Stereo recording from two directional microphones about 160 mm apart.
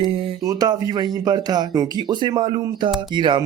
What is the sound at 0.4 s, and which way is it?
Speech, 25° right (ahead or behind).